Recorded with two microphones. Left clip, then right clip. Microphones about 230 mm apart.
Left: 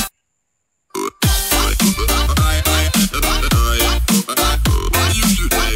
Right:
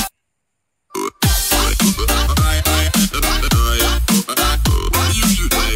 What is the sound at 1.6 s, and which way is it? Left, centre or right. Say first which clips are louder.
Music: even; centre.